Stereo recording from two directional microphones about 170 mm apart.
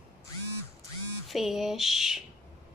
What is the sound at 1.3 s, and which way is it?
Speech, centre (ahead or behind).